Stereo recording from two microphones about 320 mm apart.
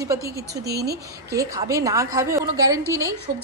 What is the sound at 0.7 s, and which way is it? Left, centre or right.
Speech, right.